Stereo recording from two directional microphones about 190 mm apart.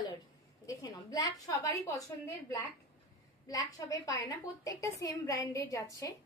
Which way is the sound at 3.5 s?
20° left (ahead or behind).